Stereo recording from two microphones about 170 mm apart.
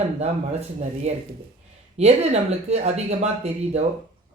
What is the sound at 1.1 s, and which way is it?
Speech, 40° right (ahead or behind).